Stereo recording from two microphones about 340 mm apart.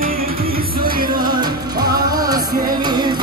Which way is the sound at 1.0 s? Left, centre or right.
Right.